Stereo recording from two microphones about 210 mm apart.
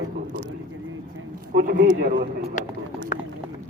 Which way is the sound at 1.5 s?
45° right (ahead or behind).